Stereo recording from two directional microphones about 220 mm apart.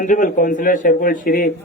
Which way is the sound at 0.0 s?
35° left (ahead or behind).